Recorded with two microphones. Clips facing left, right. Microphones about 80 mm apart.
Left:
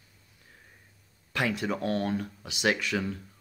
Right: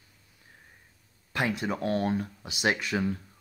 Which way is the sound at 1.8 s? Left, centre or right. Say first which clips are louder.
Right 4 dB; centre.